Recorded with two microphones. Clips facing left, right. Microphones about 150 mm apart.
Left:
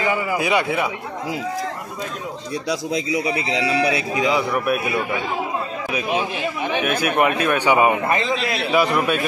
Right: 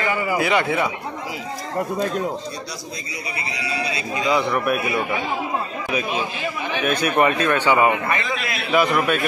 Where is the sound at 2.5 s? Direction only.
90° left.